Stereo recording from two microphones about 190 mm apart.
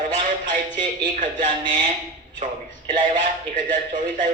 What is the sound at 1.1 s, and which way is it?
Speech, 40° right (ahead or behind).